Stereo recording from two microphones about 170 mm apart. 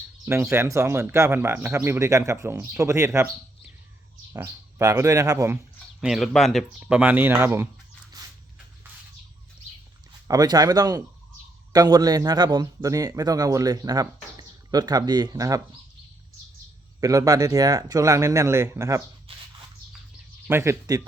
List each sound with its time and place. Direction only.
0.5 s a man's voice: 15° right (ahead or behind)
6.0 s a man's voice: centre (ahead or behind)
8.1 s a sound: 20° right (ahead or behind)
10.2 s a man's voice: 20° right (ahead or behind)
17.0 s a man's voice: 20° right (ahead or behind)
20.5 s a man's voice: 15° right (ahead or behind)